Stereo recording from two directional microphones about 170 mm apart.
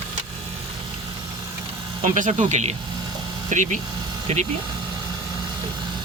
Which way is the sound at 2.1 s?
45° right (ahead or behind).